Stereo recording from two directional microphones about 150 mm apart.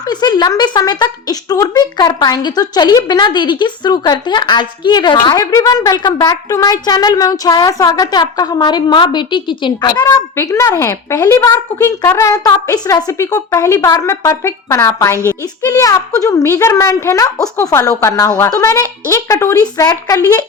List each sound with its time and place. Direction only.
0.0 s speech: 25° left (ahead or behind)